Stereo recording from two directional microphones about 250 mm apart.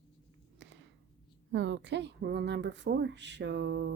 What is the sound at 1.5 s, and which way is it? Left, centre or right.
A woman's voice, right.